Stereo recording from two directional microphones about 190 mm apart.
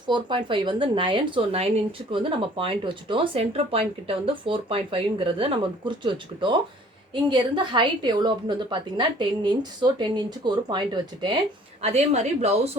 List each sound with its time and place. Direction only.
0.1 s speech: 25° right (ahead or behind)
11.8 s a woman's voice: 35° right (ahead or behind)